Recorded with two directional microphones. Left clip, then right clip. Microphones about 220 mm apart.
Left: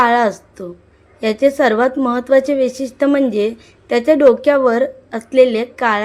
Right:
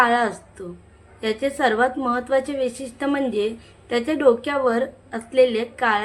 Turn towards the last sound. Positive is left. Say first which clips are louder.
# left 5 dB
turn(degrees=30)  # may be behind; listen again after turning